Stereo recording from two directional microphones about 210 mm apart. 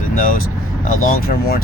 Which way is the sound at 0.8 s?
40° left (ahead or behind).